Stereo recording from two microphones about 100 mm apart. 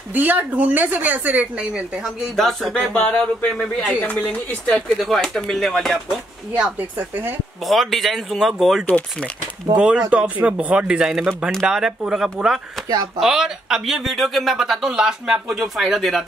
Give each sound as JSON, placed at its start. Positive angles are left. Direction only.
{"t": 0.1, "sound": "speech", "side_deg": -15}
{"t": 2.3, "sound": "speech", "side_deg": 5}
{"t": 7.0, "sound": "speech", "side_deg": -20}
{"t": 7.6, "sound": "speech", "side_deg": 0}
{"t": 8.8, "sound": "speech", "side_deg": 15}
{"t": 9.8, "sound": "speech", "side_deg": -10}